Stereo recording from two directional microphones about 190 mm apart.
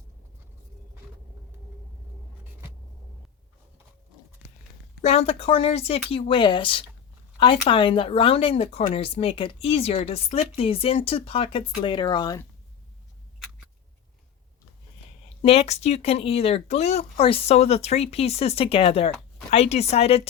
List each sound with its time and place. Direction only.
2.4 s a sound: 10° right (ahead or behind)
5.0 s speech: 30° left (ahead or behind)
15.4 s speech: 30° left (ahead or behind)